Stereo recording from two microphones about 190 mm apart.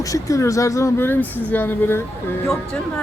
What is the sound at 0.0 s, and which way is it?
Speech, 15° left (ahead or behind).